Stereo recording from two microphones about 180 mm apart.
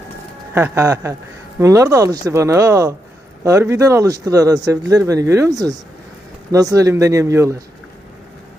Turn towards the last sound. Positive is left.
turn(degrees=-15)  # may be behind; listen again after turning